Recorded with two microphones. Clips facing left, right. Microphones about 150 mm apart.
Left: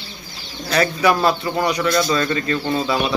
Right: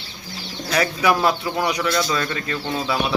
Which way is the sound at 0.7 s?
10° right (ahead or behind).